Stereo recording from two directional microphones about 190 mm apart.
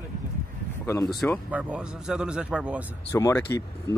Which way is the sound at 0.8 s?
15° left (ahead or behind).